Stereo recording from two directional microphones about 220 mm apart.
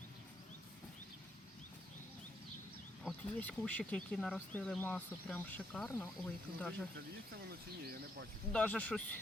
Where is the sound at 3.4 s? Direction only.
5° left (ahead or behind).